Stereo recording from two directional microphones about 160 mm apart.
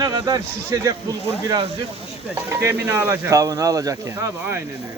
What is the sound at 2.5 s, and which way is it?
Speech, 15° right (ahead or behind).